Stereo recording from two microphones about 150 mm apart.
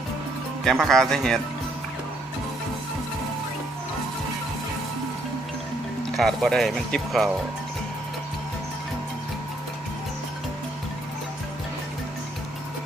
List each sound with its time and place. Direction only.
0.6 s speech: centre (ahead or behind)
6.1 s speech: centre (ahead or behind)